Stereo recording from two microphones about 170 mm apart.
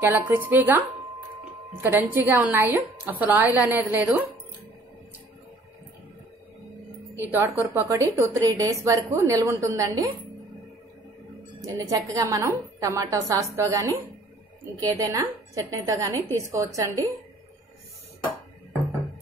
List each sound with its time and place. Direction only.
0.0 s a woman's voice: 10° right (ahead or behind)
7.2 s a woman's voice: 15° right (ahead or behind)
11.6 s a woman's voice: 20° right (ahead or behind)